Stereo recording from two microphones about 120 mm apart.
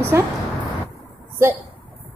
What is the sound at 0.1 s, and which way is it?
Speech, 20° right (ahead or behind).